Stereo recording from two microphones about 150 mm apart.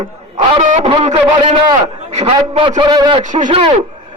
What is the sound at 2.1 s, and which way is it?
A man's voice, 45° right (ahead or behind).